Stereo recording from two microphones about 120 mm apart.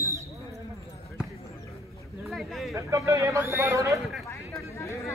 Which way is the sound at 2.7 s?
25° right (ahead or behind).